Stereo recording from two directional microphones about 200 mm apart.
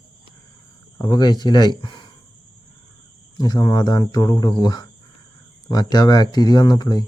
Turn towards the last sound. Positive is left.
turn(degrees=20)  # may be behind; listen again after turning